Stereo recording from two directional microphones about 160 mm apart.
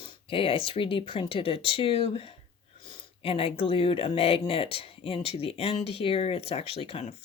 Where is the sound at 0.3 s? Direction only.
35° left (ahead or behind).